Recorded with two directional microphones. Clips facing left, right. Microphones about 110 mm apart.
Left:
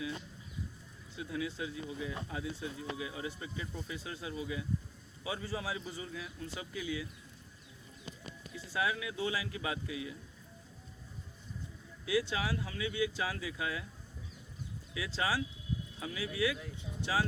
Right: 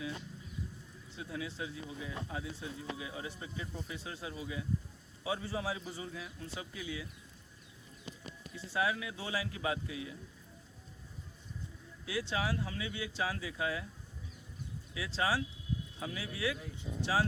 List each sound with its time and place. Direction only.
1.1 s a man's voice: 30° right (ahead or behind)
8.5 s a man's voice: 30° right (ahead or behind)
12.0 s a man's voice: 30° right (ahead or behind)
14.9 s a man's voice: 30° right (ahead or behind)